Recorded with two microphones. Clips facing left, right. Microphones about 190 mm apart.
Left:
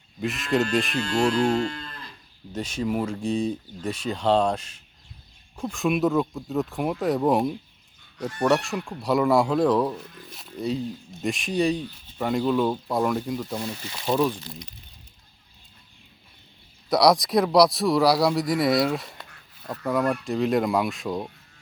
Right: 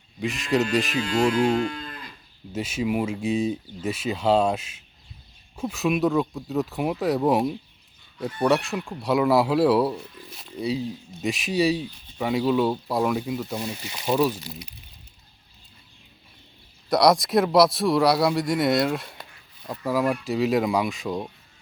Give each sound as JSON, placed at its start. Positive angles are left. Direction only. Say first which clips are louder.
{"t": 0.2, "sound": "speech", "louder": "even", "side_deg": 0}
{"t": 16.9, "sound": "speech", "louder": "even", "side_deg": 0}